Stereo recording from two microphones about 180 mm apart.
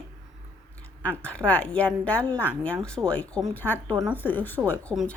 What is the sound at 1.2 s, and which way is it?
A woman's voice, 5° left (ahead or behind).